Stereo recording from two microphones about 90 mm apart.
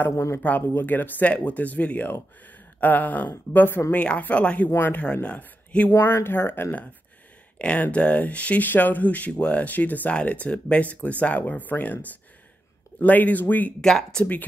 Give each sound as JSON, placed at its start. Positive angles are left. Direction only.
{"t": 0.4, "sound": "speech", "side_deg": 20}
{"t": 7.5, "sound": "speech", "side_deg": 15}
{"t": 13.7, "sound": "speech", "side_deg": 5}